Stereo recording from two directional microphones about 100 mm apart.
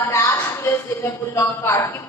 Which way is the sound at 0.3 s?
20° left (ahead or behind).